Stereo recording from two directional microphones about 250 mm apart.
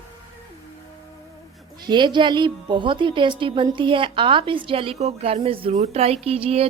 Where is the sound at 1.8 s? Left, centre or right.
Centre.